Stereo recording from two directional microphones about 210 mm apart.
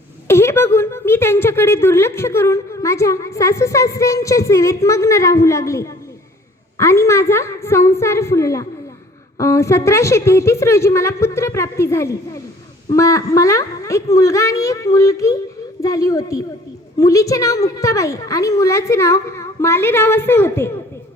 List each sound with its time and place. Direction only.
0.3 s a woman's voice: 10° left (ahead or behind)